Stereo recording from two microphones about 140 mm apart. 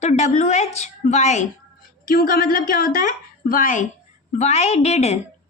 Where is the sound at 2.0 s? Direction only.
90° left.